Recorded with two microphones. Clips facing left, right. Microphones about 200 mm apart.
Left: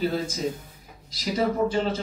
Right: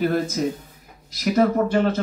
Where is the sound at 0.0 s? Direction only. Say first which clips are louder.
Right 5 dB; 65° right (ahead or behind).